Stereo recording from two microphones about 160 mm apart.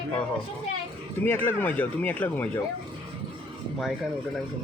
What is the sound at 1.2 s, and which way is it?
Speech, 15° left (ahead or behind).